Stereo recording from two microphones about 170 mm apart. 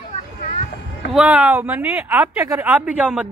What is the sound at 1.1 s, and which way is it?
Speech, 5° right (ahead or behind).